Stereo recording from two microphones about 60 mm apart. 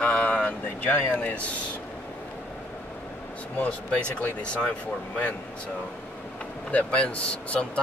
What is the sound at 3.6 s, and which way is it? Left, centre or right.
Speech, centre.